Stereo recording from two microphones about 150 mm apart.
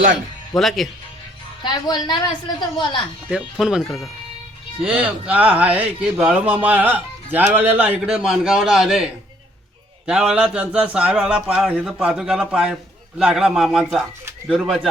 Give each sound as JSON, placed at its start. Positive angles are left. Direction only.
{"t": 0.5, "sound": "a man's voice", "side_deg": 0}
{"t": 1.6, "sound": "a woman's voice", "side_deg": 30}
{"t": 3.2, "sound": "a man's voice", "side_deg": -5}
{"t": 8.0, "sound": "a man's voice", "side_deg": 0}
{"t": 10.1, "sound": "a man's voice", "side_deg": -5}